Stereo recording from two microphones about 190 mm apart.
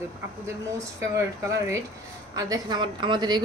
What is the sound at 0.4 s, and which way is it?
Speech, 15° right (ahead or behind).